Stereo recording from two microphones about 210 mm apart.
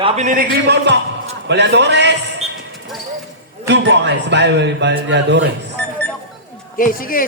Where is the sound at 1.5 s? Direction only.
55° right (ahead or behind).